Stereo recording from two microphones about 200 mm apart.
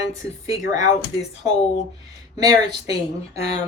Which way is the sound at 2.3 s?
20° right (ahead or behind).